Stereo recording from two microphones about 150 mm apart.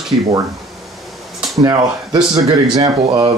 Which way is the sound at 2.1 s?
30° right (ahead or behind).